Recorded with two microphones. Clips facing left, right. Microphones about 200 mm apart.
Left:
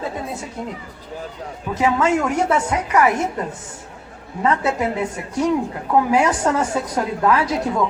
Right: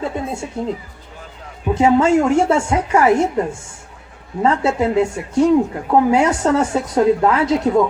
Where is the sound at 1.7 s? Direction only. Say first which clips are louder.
Right 5 dB; 25° right (ahead or behind).